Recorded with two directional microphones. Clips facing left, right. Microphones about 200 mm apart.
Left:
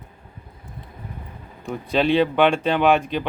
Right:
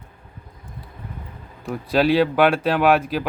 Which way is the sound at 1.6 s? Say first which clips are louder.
Right 2 dB; 5° right (ahead or behind).